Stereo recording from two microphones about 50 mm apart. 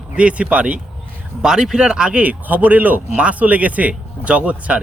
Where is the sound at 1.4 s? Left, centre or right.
Centre.